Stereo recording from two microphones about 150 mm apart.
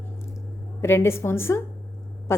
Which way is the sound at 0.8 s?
15° left (ahead or behind).